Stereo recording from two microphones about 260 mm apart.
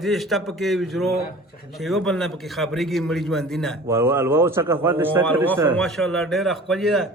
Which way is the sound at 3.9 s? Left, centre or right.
Centre.